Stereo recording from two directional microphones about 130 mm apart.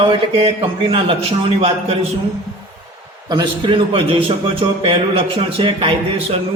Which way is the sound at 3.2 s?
35° right (ahead or behind).